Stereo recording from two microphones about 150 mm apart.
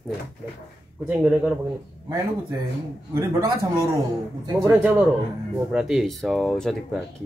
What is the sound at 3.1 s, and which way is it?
Speech, 20° right (ahead or behind).